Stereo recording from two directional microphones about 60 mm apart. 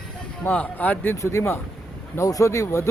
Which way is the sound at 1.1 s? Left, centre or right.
Left.